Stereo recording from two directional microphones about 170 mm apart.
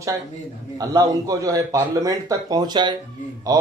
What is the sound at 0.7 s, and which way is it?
Speech, 20° right (ahead or behind).